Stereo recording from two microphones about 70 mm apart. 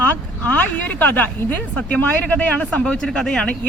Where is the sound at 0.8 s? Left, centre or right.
Left.